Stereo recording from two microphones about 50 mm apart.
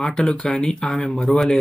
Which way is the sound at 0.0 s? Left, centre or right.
Centre.